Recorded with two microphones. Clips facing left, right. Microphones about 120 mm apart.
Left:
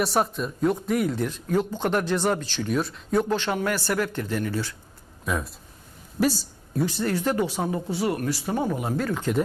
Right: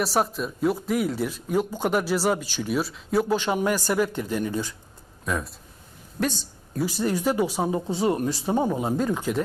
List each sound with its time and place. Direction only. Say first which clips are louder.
0.0 s speech: even; centre (ahead or behind); by 4.7 s 15° right (ahead or behind)
5.2 s speech: even; centre (ahead or behind)
6.8 s speech: right 1 dB; 15° right (ahead or behind)